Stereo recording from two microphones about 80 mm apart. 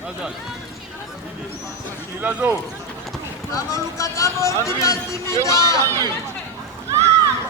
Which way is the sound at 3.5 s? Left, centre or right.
Left.